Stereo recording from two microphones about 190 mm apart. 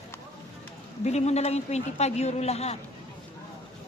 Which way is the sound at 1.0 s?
35° left (ahead or behind).